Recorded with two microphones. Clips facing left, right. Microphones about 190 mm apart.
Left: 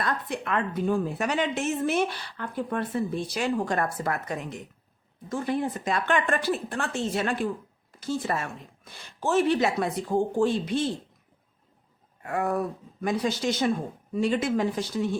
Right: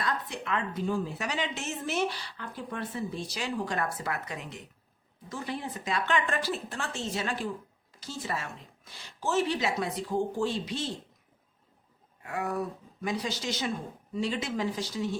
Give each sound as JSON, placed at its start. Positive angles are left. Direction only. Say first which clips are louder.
{"t": 0.0, "sound": "a woman's voice", "louder": "left 4 dB", "side_deg": 55}
{"t": 12.2, "sound": "a woman's voice", "louder": "left 5 dB", "side_deg": 50}